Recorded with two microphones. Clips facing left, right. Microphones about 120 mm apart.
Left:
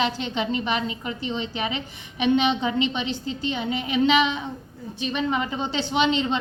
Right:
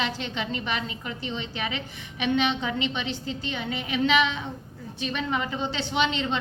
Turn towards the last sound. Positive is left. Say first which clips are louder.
# left 4 dB
turn(degrees=20)  # may be behind; listen again after turning